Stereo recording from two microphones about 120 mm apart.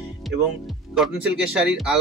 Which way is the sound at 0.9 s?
5° right (ahead or behind).